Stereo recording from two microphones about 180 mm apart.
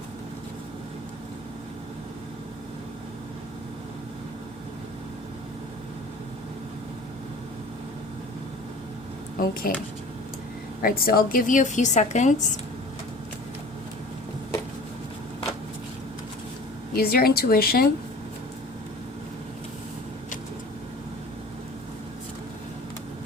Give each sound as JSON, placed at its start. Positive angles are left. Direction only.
{"t": 9.4, "sound": "a woman's voice", "side_deg": 55}
{"t": 10.8, "sound": "a woman's voice", "side_deg": 55}
{"t": 16.9, "sound": "speech", "side_deg": 55}